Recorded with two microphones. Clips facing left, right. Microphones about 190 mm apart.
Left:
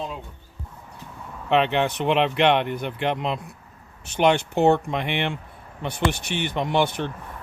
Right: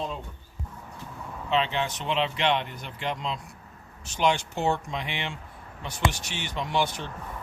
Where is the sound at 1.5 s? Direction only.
65° left (ahead or behind).